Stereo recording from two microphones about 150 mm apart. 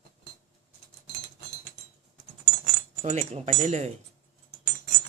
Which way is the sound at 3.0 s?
45° right (ahead or behind).